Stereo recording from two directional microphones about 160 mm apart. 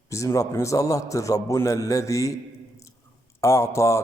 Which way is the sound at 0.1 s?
20° left (ahead or behind).